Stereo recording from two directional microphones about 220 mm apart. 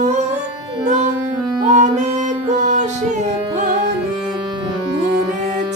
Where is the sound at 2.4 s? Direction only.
30° right (ahead or behind).